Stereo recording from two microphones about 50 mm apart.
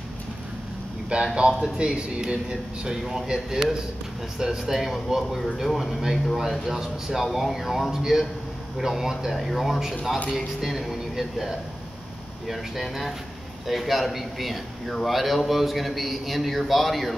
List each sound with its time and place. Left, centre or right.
1.0 s a man's voice: centre
3.0 s a man's voice: centre